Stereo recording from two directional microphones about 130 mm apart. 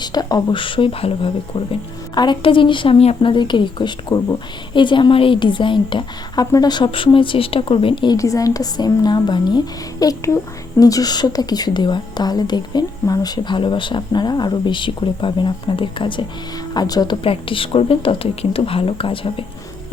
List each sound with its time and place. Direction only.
0.0 s speech: 30° left (ahead or behind); by 3.3 s 50° left (ahead or behind)
3.3 s speech: 35° left (ahead or behind)
8.1 s speech: 25° left (ahead or behind)
17.2 s speech: 40° left (ahead or behind)